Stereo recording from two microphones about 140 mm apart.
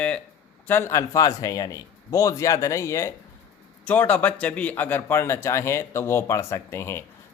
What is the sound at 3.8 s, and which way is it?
Speech, 10° left (ahead or behind).